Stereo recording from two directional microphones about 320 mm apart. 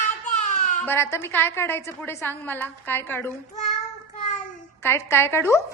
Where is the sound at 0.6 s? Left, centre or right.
Left.